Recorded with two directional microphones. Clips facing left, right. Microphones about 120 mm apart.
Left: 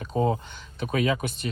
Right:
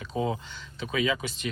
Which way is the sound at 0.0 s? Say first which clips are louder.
Left 4 dB; 45° left (ahead or behind).